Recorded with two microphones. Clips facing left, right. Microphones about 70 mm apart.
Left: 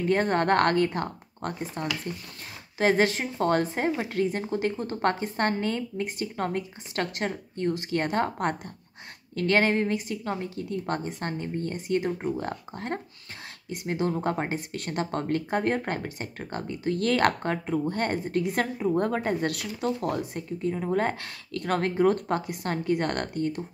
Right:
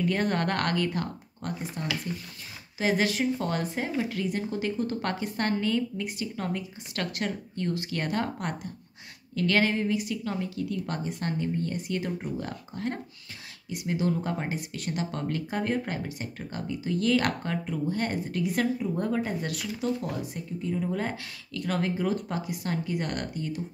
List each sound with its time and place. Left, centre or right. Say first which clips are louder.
0.0 s speech: left 3 dB; left